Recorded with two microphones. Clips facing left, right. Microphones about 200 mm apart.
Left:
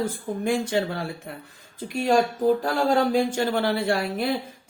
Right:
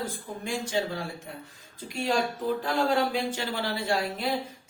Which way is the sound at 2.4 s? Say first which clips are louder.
Left 5 dB; 40° left (ahead or behind).